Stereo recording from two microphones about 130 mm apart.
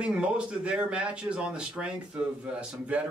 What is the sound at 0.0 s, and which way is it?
Speech, 10° right (ahead or behind).